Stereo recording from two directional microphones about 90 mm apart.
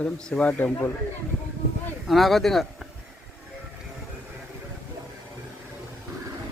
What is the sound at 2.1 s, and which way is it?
Speech, centre (ahead or behind).